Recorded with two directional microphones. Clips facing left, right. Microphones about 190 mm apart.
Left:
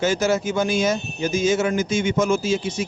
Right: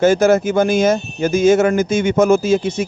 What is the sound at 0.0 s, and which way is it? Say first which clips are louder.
Speech: right 8 dB; 55° right (ahead or behind).